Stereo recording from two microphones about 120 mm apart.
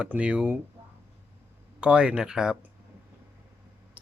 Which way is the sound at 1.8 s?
10° right (ahead or behind).